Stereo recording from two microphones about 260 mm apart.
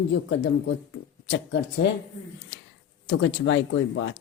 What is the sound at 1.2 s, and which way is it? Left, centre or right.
Speech, left.